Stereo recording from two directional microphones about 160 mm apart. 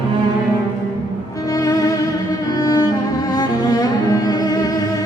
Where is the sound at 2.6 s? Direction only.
25° left (ahead or behind).